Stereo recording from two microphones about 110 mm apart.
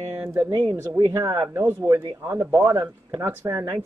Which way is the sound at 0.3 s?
20° right (ahead or behind).